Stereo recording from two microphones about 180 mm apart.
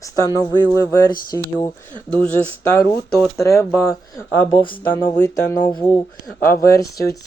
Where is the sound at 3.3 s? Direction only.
15° left (ahead or behind).